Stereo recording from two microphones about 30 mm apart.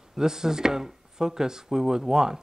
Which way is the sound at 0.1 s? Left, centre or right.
Centre.